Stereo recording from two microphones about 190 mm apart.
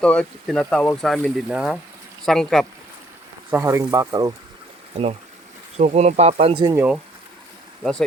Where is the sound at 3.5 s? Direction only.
15° right (ahead or behind).